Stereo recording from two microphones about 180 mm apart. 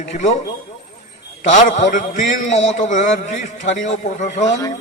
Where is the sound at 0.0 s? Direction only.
40° left (ahead or behind).